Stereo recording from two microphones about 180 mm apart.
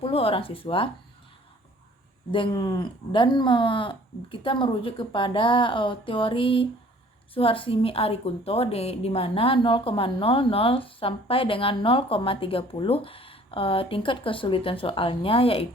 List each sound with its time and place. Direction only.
0.0 s a woman's voice: 30° left (ahead or behind)
2.3 s a woman's voice: 25° left (ahead or behind)